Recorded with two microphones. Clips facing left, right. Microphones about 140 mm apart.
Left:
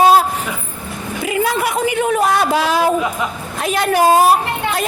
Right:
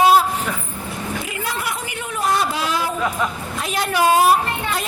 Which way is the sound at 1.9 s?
85° left.